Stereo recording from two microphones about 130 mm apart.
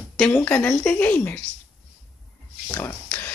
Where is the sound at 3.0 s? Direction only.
15° left (ahead or behind).